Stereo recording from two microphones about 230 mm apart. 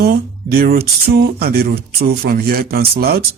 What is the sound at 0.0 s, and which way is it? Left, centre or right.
Speech, right.